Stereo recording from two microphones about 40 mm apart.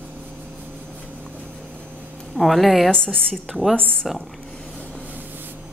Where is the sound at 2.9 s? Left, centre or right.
Left.